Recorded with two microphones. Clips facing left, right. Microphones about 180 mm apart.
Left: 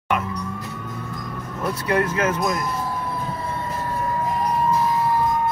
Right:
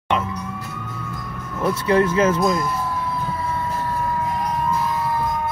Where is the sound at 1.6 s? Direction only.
30° right (ahead or behind).